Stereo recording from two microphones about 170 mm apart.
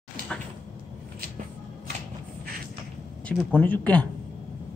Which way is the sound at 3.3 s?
10° left (ahead or behind).